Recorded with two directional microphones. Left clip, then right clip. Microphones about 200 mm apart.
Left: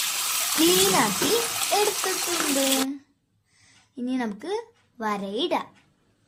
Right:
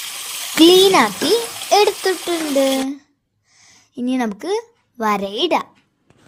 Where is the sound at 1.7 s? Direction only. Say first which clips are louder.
Right 11 dB; 35° right (ahead or behind).